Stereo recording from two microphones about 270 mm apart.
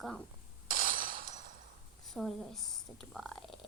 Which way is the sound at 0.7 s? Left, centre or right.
Right.